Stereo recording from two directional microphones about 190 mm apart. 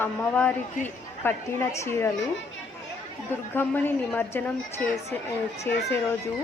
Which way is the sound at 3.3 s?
10° left (ahead or behind).